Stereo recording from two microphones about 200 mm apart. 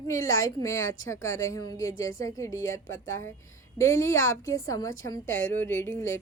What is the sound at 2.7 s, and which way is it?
Speech, 75° left (ahead or behind).